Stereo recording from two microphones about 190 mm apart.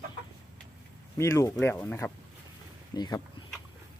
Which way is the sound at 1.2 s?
15° left (ahead or behind).